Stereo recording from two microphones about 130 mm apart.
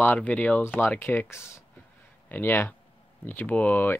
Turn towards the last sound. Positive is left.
turn(degrees=10)  # may be behind; listen again after turning